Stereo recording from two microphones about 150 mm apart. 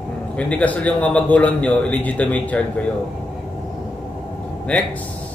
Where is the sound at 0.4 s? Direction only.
10° left (ahead or behind).